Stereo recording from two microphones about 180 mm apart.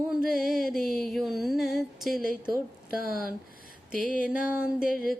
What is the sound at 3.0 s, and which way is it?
Speech, 55° right (ahead or behind).